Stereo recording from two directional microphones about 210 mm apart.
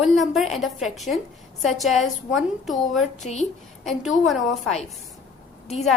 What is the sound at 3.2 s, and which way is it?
Speech, 35° left (ahead or behind).